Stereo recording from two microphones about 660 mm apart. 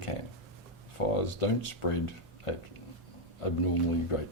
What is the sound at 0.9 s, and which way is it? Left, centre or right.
Speech, left.